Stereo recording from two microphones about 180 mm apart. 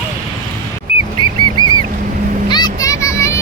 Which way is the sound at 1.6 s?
25° right (ahead or behind).